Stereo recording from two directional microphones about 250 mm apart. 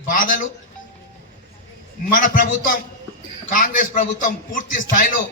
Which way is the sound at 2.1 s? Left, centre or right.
Left.